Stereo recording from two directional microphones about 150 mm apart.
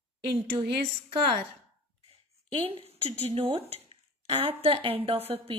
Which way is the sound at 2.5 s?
40° right (ahead or behind).